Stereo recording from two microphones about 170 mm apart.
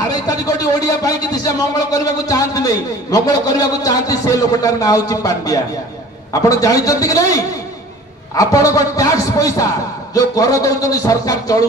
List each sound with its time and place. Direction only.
0.1 s a man's voice: 20° left (ahead or behind)